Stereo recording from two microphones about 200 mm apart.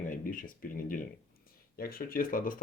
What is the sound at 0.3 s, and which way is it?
Speech, 45° left (ahead or behind).